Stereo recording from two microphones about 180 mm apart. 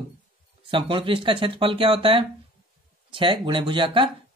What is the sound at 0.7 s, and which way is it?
Speech, 25° right (ahead or behind).